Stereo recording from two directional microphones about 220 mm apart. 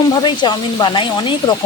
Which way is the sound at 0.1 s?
20° left (ahead or behind).